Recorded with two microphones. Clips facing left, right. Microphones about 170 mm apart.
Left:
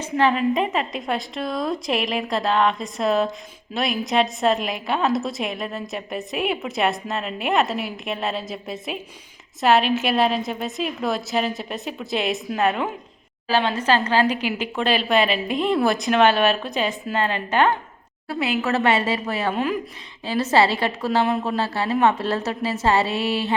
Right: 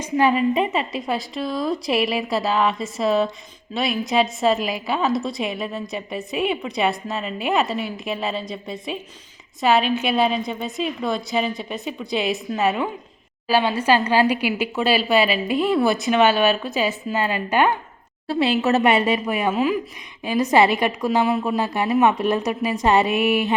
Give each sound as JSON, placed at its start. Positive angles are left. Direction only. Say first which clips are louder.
{"t": 0.0, "sound": "a woman's voice", "louder": "right 1 dB", "side_deg": -10}
{"t": 18.3, "sound": "a woman's voice", "louder": "right 4 dB", "side_deg": -30}